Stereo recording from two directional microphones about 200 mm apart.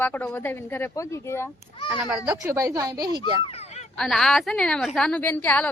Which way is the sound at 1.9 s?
5° right (ahead or behind).